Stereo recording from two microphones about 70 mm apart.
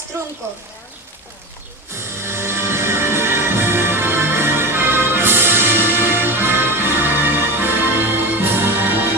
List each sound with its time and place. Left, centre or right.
0.1 s speech: right
1.9 s music: right